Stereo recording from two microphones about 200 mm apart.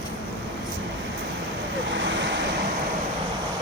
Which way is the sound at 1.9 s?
65° right (ahead or behind).